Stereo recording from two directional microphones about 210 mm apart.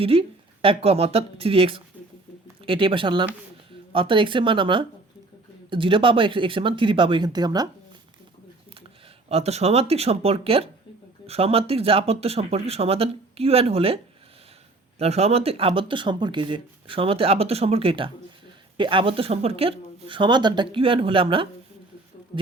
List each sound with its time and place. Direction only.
0.0 s speech: 25° right (ahead or behind)
9.3 s speech: 30° right (ahead or behind)